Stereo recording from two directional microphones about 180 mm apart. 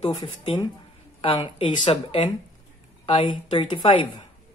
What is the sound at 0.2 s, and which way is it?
Speech, 25° left (ahead or behind).